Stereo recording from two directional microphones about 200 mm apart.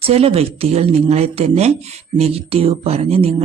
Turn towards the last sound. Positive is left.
turn(degrees=-30)  # may be behind; listen again after turning